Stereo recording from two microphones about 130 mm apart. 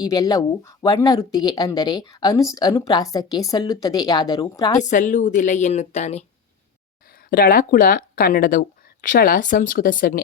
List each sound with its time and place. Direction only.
0.0 s speech: 30° left (ahead or behind)
4.8 s a woman's voice: 75° left (ahead or behind); by 6.2 s 55° left (ahead or behind)
7.3 s speech: 90° left